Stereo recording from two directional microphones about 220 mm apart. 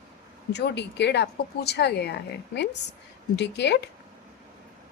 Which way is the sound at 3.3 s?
50° left (ahead or behind).